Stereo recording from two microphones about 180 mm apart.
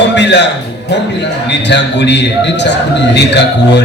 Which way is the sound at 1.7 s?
70° left (ahead or behind).